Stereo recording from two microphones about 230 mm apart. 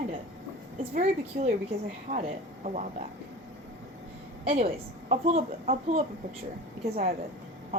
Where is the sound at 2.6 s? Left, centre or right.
Right.